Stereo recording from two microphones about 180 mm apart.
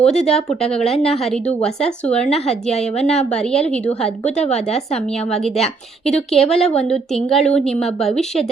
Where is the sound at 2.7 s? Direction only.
35° left (ahead or behind).